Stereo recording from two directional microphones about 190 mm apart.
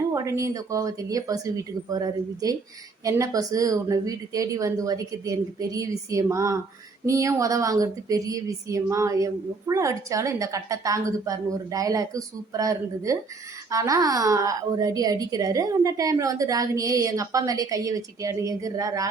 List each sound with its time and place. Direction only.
0.1 s speech: 15° right (ahead or behind)